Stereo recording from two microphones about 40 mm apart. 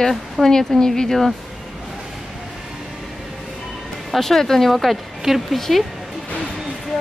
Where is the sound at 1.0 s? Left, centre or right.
Centre.